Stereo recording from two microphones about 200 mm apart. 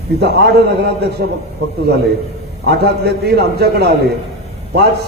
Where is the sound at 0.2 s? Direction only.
55° right (ahead or behind).